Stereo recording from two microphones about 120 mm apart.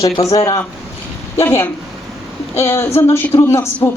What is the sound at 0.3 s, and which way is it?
Speech, 30° left (ahead or behind).